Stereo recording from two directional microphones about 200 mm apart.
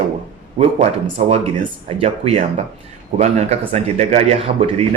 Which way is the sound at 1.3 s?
30° right (ahead or behind).